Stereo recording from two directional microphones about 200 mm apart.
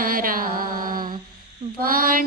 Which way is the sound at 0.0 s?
45° right (ahead or behind).